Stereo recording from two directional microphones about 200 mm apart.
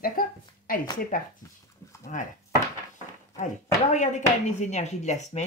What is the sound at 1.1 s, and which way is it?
Speech, 45° left (ahead or behind).